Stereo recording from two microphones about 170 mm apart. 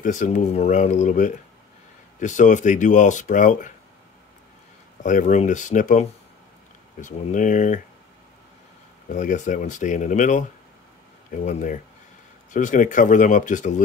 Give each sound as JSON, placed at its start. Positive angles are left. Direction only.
{"t": 0.0, "sound": "speech", "side_deg": 50}
{"t": 5.0, "sound": "speech", "side_deg": 45}
{"t": 9.1, "sound": "speech", "side_deg": 45}
{"t": 11.4, "sound": "speech", "side_deg": 50}